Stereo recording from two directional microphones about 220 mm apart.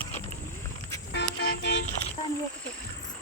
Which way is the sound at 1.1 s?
50° left (ahead or behind).